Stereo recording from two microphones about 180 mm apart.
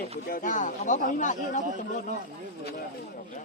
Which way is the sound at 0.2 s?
55° left (ahead or behind).